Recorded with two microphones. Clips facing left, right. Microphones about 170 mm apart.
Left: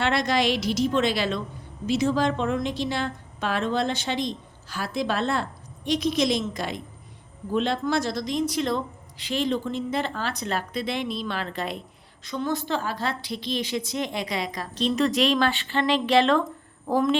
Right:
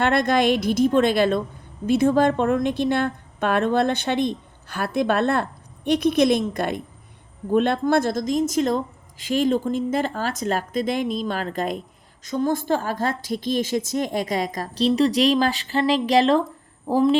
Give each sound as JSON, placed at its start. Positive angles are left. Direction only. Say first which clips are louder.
{"t": 0.0, "sound": "a woman's voice", "louder": "right 4 dB", "side_deg": -55}